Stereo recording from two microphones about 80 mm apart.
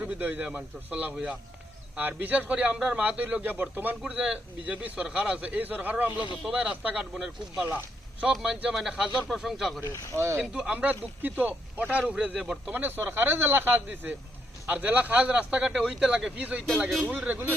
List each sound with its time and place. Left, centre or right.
0.0 s a man's voice: centre
1.1 s a man's voice: centre
2.0 s a man's voice: right
8.3 s a man's voice: centre
9.8 s speech: left
10.2 s speech: right
10.4 s a man's voice: centre
12.7 s a man's voice: right